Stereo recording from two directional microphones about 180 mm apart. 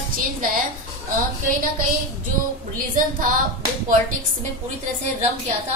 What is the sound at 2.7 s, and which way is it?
Speech, 50° right (ahead or behind).